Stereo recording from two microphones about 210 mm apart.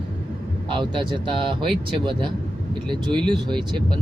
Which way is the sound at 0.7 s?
25° right (ahead or behind).